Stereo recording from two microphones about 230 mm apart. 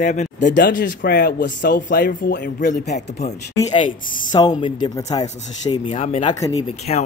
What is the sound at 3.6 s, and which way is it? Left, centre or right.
Speech, left.